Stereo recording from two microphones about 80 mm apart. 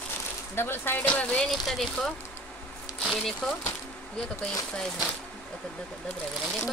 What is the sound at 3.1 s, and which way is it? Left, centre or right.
Speech, centre.